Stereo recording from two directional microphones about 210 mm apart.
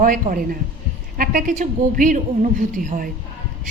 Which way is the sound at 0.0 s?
40° right (ahead or behind).